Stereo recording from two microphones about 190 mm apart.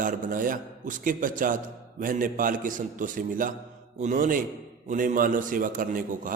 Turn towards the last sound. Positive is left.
turn(degrees=-45)  # may be behind; listen again after turning